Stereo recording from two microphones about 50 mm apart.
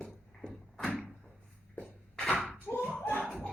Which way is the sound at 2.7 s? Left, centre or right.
Left.